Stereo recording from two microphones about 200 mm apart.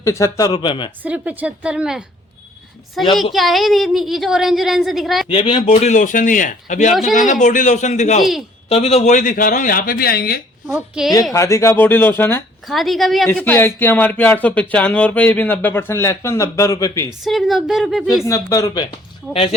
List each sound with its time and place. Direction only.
0.0 s speech: 15° left (ahead or behind)
1.0 s a woman's voice: 5° right (ahead or behind)
5.3 s a man's voice: 30° left (ahead or behind)
8.2 s a woman's voice: centre (ahead or behind)
8.7 s speech: 30° left (ahead or behind); by 10.4 s 50° left (ahead or behind)
10.7 s a woman's voice: 5° right (ahead or behind)
11.3 s speech: 15° left (ahead or behind)
12.6 s a woman's voice: centre (ahead or behind); by 17.1 s 15° left (ahead or behind)
17.2 s a woman's voice: centre (ahead or behind)
18.3 s speech: 15° left (ahead or behind)